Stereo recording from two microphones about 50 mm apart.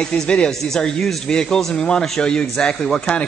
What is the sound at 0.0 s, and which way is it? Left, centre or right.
Speech, centre.